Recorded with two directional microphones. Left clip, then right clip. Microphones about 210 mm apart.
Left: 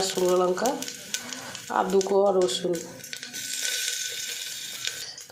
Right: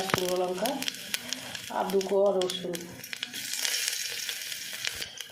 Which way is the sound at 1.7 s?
35° left (ahead or behind).